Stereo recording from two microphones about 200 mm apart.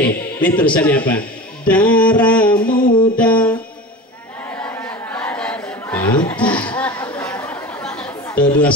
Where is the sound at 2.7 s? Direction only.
45° left (ahead or behind).